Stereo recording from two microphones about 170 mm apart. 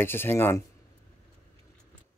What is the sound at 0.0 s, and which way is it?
Speech, 15° left (ahead or behind).